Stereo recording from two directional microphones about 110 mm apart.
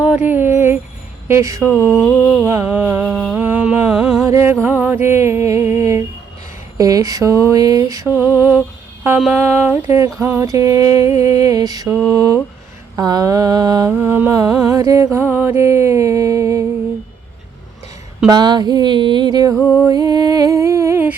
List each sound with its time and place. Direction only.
0.3 s a sound: 20° right (ahead or behind)
1.3 s music: 30° right (ahead or behind)
2.0 s mantra: 5° left (ahead or behind)
2.4 s music: 30° right (ahead or behind)
2.6 s a sound: 15° right (ahead or behind)
4.3 s music: 25° right (ahead or behind)
6.7 s mantra: 30° right (ahead or behind)
8.2 s a sound: 20° right (ahead or behind)
9.3 s music: 15° right (ahead or behind)
10.2 s mantra: 20° right (ahead or behind)
13.9 s music: 20° right (ahead or behind)
14.7 s music: 30° right (ahead or behind)
18.3 s mantra: 40° right (ahead or behind)
19.8 s humming: 35° right (ahead or behind)